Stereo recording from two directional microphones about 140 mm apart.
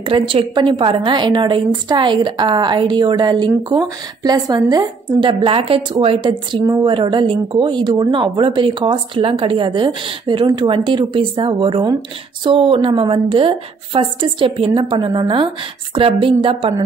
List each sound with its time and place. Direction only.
0.0 s a woman's voice: 40° right (ahead or behind)
6.6 s a woman's voice: 25° right (ahead or behind)
6.9 s a woman's voice: 35° right (ahead or behind)